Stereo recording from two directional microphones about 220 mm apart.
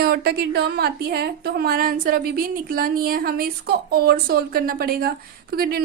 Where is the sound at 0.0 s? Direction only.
45° right (ahead or behind).